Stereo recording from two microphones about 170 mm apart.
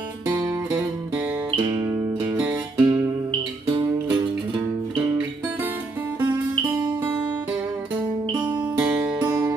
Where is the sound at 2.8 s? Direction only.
25° right (ahead or behind).